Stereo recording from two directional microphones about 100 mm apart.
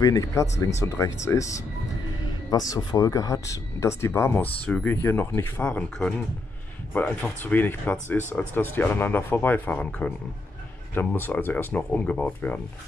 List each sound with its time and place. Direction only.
0.0 s speech: 35° left (ahead or behind)
4.6 s speech: 15° left (ahead or behind)